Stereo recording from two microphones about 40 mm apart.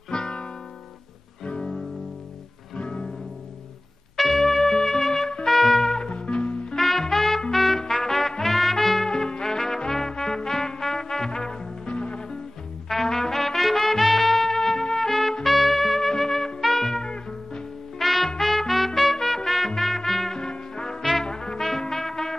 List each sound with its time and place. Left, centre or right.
0.1 s guitar: centre
1.4 s music: centre
4.2 s trumpet: centre
6.0 s music: left
6.8 s music: centre
7.8 s trumpet: centre
9.1 s music: centre
12.8 s music: centre
17.9 s music: centre
20.3 s music: centre
21.0 s music: centre